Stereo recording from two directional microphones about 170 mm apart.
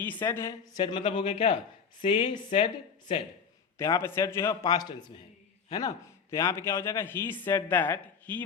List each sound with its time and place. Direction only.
0.0 s a man's voice: 10° left (ahead or behind)
0.8 s a man's voice: 25° left (ahead or behind)
3.8 s a man's voice: 20° left (ahead or behind)